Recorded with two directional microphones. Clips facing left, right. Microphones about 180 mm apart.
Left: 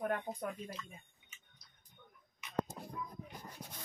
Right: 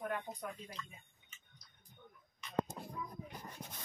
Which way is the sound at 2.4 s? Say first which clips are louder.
Right 2 dB; 10° left (ahead or behind).